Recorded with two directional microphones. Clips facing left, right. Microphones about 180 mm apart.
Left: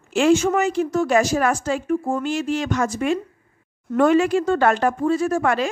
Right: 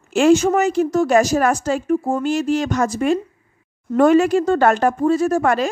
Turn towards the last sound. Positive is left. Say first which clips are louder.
# right 3 dB
turn(degrees=-40)  # may be behind; listen again after turning